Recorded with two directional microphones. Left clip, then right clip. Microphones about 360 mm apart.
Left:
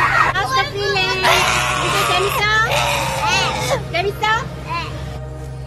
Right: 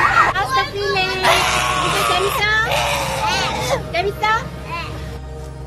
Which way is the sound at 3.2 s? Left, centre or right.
Centre.